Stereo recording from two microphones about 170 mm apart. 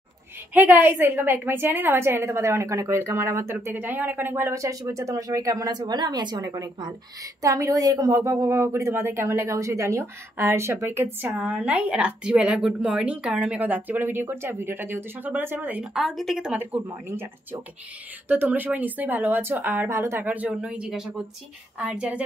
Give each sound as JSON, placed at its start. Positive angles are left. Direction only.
{"t": 0.6, "sound": "a woman's voice", "side_deg": -10}